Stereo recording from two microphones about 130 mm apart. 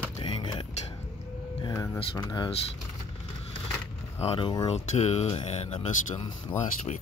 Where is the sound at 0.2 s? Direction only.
40° left (ahead or behind).